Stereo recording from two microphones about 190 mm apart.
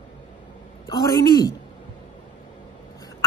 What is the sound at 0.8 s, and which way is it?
Speech, 20° left (ahead or behind).